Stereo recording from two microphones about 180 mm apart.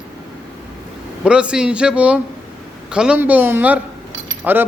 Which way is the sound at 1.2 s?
5° right (ahead or behind).